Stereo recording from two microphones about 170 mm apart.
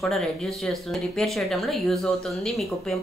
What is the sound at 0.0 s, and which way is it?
A woman's voice, centre (ahead or behind).